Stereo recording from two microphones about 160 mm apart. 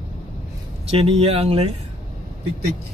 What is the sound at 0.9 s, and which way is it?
Speech, 40° right (ahead or behind).